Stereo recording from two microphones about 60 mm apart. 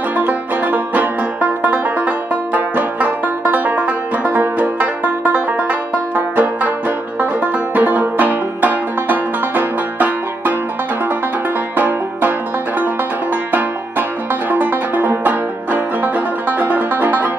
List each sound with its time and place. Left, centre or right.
0.1 s banjo: right
11.7 s banjo: right